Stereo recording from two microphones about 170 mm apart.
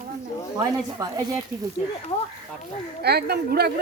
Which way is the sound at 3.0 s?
70° right (ahead or behind).